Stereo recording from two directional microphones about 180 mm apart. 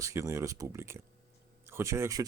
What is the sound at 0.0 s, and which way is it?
Speech, 15° right (ahead or behind).